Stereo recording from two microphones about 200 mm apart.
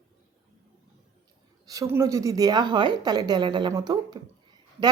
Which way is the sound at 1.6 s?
15° right (ahead or behind).